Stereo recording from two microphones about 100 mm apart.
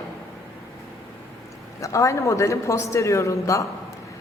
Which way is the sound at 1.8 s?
30° left (ahead or behind).